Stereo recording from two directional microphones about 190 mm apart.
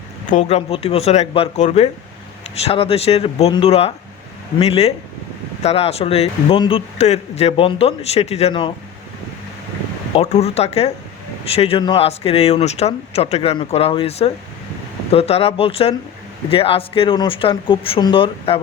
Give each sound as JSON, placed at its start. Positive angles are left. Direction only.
{"t": 0.3, "sound": "speech", "side_deg": 35}
{"t": 10.2, "sound": "speech", "side_deg": 35}